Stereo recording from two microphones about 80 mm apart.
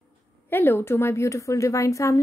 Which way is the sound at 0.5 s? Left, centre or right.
Left.